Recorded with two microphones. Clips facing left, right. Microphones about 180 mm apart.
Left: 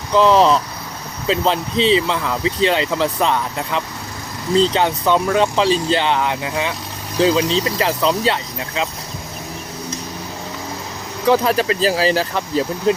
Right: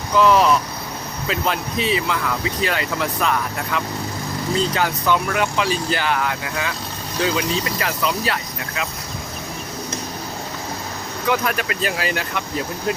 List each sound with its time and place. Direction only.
0.1 s speech: 25° left (ahead or behind)
11.3 s speech: 30° left (ahead or behind)